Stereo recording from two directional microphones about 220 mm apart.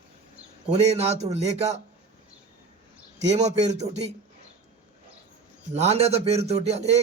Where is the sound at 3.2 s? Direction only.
30° right (ahead or behind).